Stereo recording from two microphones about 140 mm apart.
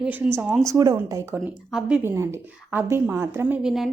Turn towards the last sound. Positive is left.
turn(degrees=-5)  # may be behind; listen again after turning